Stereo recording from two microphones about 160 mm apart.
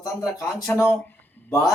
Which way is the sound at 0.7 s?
5° left (ahead or behind).